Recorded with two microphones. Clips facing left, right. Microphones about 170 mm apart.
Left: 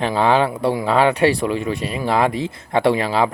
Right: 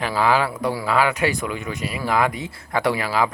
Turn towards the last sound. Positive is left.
turn(degrees=25)  # may be behind; listen again after turning